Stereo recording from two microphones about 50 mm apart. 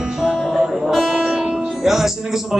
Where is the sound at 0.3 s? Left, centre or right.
Centre.